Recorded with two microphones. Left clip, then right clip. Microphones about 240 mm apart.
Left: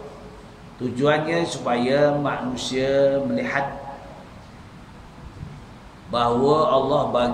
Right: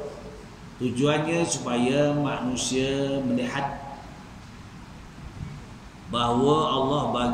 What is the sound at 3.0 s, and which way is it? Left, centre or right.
Speech, centre.